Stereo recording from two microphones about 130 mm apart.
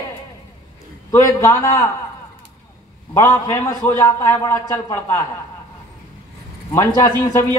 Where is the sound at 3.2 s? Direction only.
20° left (ahead or behind).